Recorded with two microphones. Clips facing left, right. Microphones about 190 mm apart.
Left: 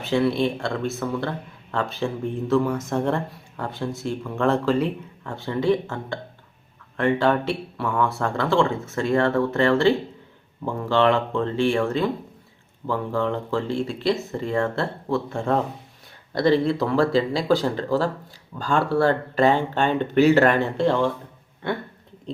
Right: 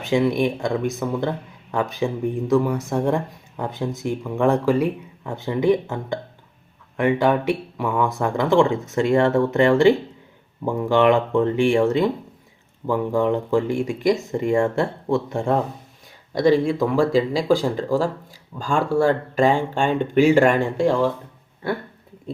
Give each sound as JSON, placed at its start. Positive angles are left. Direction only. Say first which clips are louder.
{"t": 0.0, "sound": "speech", "louder": "right 2 dB", "side_deg": -15}